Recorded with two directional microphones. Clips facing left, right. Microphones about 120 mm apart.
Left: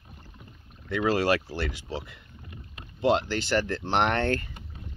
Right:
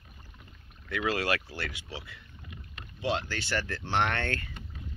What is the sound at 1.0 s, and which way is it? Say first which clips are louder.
Speech: left 6 dB; 35° left (ahead or behind).